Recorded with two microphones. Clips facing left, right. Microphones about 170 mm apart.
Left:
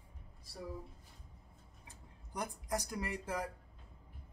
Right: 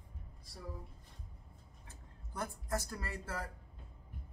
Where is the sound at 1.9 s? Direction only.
15° left (ahead or behind).